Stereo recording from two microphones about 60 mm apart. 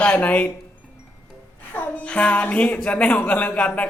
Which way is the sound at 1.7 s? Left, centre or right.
Left.